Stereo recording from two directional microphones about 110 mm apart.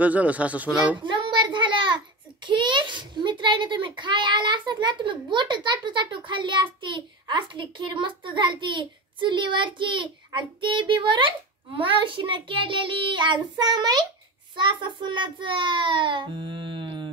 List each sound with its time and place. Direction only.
0.0 s speech: 15° right (ahead or behind)
1.0 s child singing: 45° right (ahead or behind)
2.4 s a child's voice: 45° right (ahead or behind)